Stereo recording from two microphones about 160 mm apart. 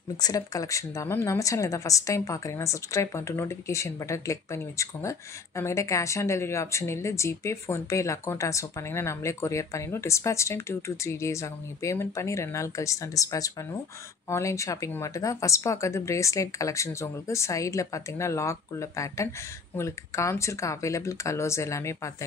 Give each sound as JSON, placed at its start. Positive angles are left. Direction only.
{"t": 0.2, "sound": "a woman's voice", "side_deg": 20}